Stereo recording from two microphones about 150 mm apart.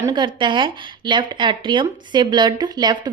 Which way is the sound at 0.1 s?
30° right (ahead or behind).